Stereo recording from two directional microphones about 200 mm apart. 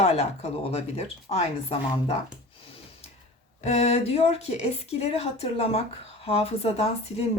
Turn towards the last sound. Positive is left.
turn(degrees=30)  # may be behind; listen again after turning